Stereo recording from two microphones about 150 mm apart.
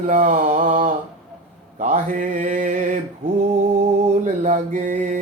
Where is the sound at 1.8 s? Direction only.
55° right (ahead or behind).